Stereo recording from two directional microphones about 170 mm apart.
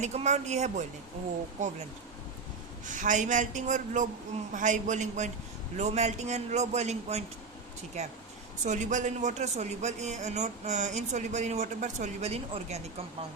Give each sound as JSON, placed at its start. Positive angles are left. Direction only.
{"t": 0.0, "sound": "a man's voice", "side_deg": -40}
{"t": 2.8, "sound": "a man's voice", "side_deg": -50}